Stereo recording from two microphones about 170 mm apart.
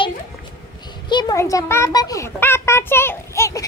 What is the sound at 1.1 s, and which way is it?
A child's voice, 25° left (ahead or behind).